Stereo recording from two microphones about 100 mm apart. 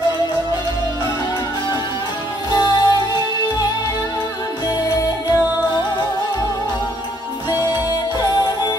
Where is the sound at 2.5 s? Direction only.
45° left (ahead or behind).